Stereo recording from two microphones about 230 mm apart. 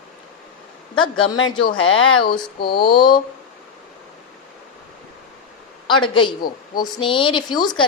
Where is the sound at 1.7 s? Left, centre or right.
Left.